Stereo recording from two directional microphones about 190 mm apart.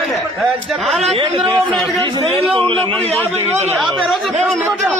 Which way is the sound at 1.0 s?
30° right (ahead or behind).